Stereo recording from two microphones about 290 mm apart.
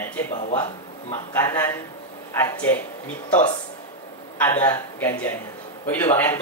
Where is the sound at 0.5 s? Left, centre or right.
Centre.